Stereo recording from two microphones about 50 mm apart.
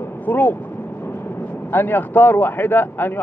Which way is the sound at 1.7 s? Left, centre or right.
Left.